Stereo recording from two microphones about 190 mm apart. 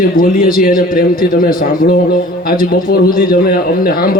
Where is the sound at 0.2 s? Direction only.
50° left (ahead or behind).